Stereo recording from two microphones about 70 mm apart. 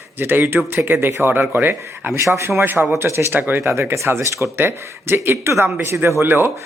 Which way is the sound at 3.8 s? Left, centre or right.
Right.